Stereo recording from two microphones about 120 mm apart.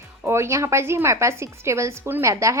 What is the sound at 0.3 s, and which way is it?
Speech, 20° right (ahead or behind).